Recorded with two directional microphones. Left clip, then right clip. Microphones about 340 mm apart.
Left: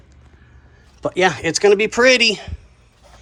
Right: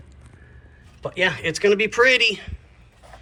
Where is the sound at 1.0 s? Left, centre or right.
Centre.